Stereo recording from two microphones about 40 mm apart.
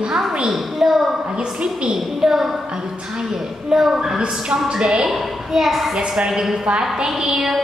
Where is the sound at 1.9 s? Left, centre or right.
Centre.